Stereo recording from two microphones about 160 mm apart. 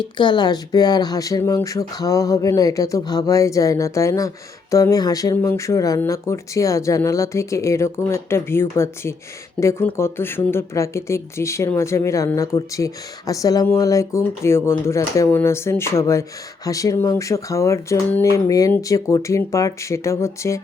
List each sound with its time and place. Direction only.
0.0 s speech: 30° left (ahead or behind)